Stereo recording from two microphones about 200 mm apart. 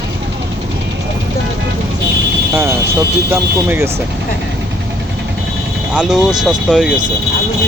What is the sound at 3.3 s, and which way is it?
Speech, 10° right (ahead or behind).